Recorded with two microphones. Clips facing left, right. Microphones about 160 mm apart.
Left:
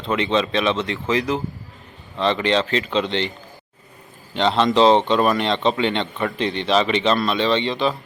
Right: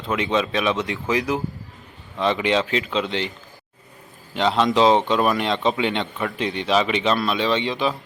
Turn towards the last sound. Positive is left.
turn(degrees=0)  # may be behind; listen again after turning